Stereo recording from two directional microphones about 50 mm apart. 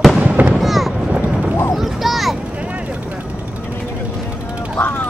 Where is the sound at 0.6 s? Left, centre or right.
Centre.